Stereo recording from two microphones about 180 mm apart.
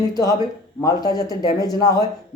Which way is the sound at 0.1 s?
20° left (ahead or behind).